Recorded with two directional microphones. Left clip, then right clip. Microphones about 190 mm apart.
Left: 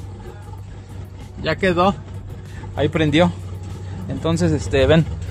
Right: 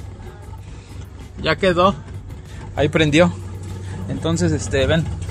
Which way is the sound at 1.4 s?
10° right (ahead or behind).